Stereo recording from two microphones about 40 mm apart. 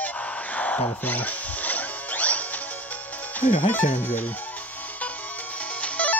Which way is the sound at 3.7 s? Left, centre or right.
Left.